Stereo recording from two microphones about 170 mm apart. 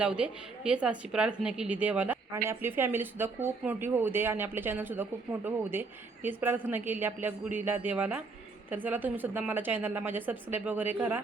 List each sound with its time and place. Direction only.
0.0 s a woman's voice: 5° right (ahead or behind)